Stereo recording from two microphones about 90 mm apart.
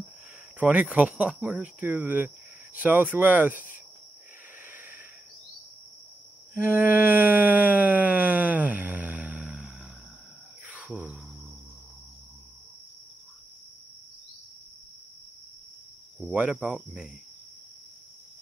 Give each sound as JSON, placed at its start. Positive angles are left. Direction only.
{"t": 0.6, "sound": "speech", "side_deg": -15}
{"t": 4.6, "sound": "snort", "side_deg": -20}
{"t": 6.5, "sound": "a sound", "side_deg": -20}
{"t": 16.2, "sound": "speech", "side_deg": -10}